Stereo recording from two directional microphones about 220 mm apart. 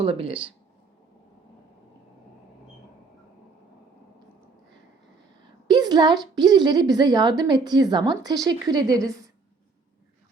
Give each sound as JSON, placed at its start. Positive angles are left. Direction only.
{"t": 0.0, "sound": "a woman's voice", "side_deg": -25}
{"t": 5.6, "sound": "a woman's voice", "side_deg": -20}